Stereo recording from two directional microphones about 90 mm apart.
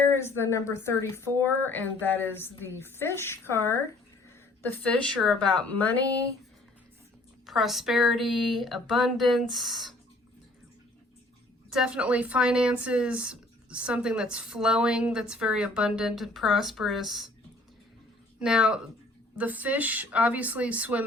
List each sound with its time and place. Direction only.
0.2 s a woman's voice: 25° left (ahead or behind)
4.7 s a woman's voice: 15° left (ahead or behind)
7.4 s speech: centre (ahead or behind)
11.7 s speech: 10° right (ahead or behind)
18.3 s speech: 10° right (ahead or behind)